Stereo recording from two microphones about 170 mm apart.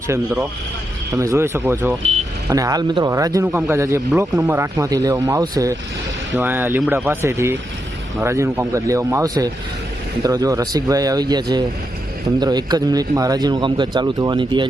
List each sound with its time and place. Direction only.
1.1 s speech: 20° right (ahead or behind)